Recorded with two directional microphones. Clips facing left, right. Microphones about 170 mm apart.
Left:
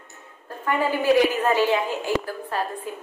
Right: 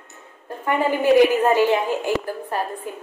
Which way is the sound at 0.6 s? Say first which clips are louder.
Right 2 dB; 15° right (ahead or behind).